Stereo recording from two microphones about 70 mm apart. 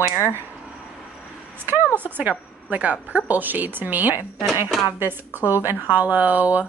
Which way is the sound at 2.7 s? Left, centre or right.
Right.